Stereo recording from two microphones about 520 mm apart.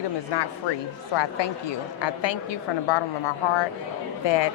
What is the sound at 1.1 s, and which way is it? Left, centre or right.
A woman's voice, left.